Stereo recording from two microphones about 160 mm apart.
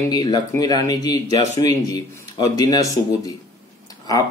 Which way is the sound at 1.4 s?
45° right (ahead or behind).